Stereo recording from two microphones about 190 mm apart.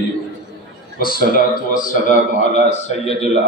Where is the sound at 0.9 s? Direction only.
50° left (ahead or behind).